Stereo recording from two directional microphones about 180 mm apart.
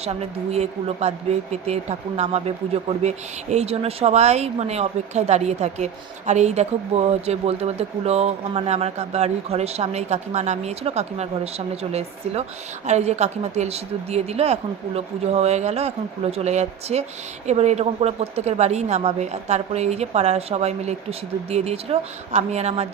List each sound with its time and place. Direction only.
0.0 s speech: 35° right (ahead or behind)